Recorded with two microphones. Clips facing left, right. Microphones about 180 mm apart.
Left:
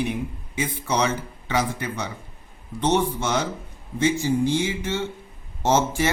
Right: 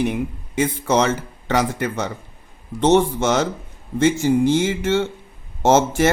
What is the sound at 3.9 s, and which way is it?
Speech, 50° right (ahead or behind).